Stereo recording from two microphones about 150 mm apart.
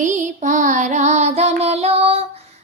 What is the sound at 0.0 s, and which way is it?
Child singing, 55° right (ahead or behind).